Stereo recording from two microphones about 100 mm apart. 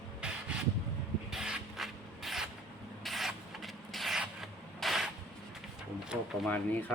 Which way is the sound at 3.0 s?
Centre (ahead or behind).